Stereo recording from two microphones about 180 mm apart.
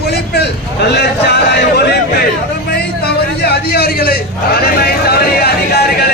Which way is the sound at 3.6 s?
60° left (ahead or behind).